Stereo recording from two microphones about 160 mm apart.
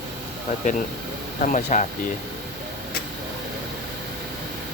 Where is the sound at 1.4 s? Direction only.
55° left (ahead or behind).